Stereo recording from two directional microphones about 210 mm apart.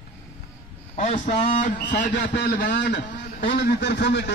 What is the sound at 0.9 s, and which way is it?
A man's voice, 35° left (ahead or behind).